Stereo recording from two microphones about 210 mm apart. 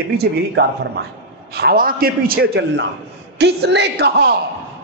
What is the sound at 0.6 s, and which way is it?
Speech, 50° right (ahead or behind).